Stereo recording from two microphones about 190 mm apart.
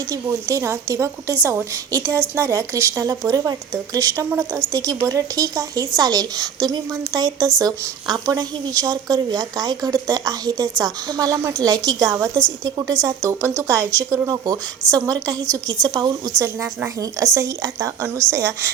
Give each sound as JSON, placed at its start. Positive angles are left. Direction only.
{"t": 0.1, "sound": "a woman's voice", "side_deg": -15}